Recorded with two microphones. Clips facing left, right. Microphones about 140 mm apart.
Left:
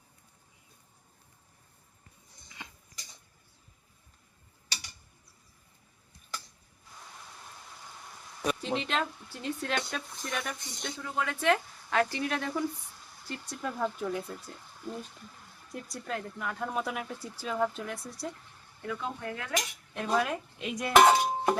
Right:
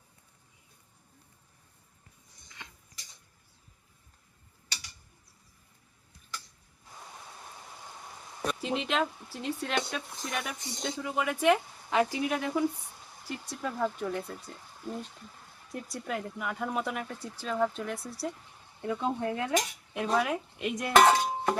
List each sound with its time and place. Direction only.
8.4 s speech: centre (ahead or behind)
18.8 s cutlery: 25° right (ahead or behind)
20.1 s speech: centre (ahead or behind)
20.9 s a sound: 10° left (ahead or behind)